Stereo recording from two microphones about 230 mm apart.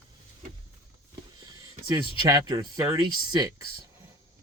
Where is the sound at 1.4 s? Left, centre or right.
Centre.